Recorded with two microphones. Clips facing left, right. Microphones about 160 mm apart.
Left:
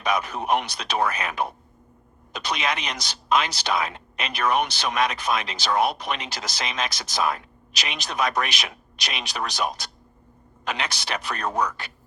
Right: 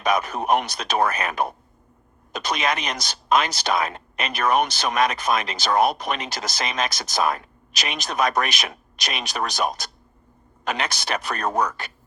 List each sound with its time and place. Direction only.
0.0 s speech: 45° right (ahead or behind)